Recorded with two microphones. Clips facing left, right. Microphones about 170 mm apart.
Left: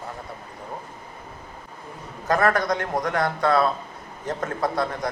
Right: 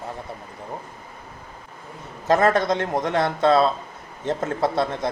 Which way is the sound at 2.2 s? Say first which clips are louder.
Right 3 dB; 25° right (ahead or behind).